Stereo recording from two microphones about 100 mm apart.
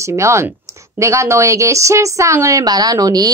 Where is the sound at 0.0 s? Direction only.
30° right (ahead or behind).